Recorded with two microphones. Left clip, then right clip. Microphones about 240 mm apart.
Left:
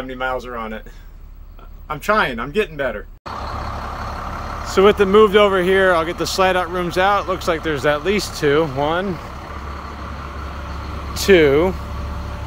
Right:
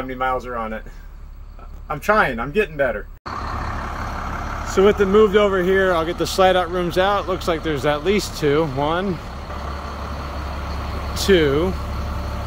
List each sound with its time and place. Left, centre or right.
1.9 s speech: centre
3.3 s vehicle: left
4.7 s speech: centre
11.1 s speech: centre